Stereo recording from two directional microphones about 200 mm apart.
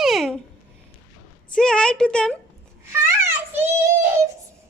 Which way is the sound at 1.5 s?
5° left (ahead or behind).